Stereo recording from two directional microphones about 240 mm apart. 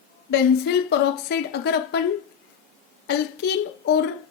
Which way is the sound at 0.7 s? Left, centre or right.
Left.